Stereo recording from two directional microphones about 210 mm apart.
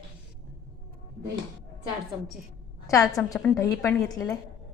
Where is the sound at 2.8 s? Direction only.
15° left (ahead or behind).